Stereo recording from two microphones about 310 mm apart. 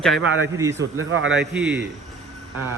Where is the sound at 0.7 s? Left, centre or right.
Right.